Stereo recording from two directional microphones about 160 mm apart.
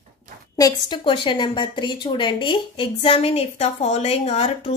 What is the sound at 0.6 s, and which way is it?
A woman's voice, 25° left (ahead or behind).